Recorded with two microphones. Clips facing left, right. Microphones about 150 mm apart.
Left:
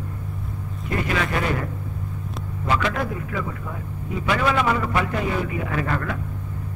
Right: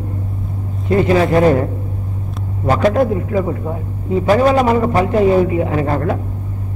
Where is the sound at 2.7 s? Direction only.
40° right (ahead or behind).